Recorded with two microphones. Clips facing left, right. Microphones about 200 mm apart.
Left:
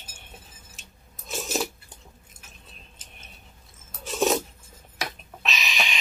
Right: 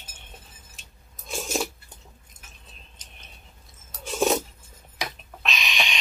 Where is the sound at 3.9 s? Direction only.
Centre (ahead or behind).